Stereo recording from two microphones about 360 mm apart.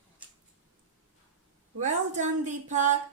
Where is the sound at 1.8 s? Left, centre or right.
Centre.